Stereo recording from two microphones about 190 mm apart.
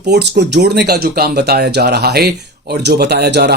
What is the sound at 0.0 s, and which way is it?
Speech, 60° right (ahead or behind).